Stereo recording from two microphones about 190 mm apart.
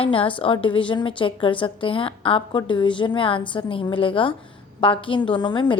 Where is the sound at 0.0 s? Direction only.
30° left (ahead or behind).